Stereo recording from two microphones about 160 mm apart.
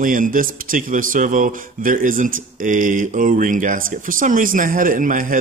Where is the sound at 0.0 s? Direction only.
55° right (ahead or behind).